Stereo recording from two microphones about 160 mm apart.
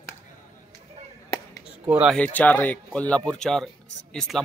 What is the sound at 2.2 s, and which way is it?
Speech, 10° left (ahead or behind).